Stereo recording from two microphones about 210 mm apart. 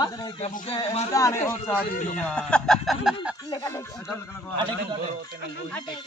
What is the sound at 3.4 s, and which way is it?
Speech, 15° left (ahead or behind).